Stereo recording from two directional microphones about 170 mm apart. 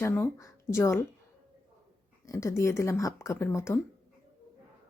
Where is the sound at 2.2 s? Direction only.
20° left (ahead or behind).